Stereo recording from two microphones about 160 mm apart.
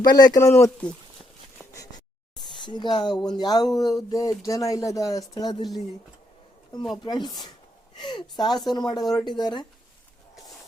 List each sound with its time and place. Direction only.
0.0 s speech: 25° left (ahead or behind)
1.6 s a sound: 15° right (ahead or behind)
2.6 s speech: 30° left (ahead or behind)
6.9 s speech: 25° left (ahead or behind)